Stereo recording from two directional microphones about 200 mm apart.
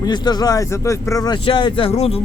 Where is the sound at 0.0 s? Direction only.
20° left (ahead or behind).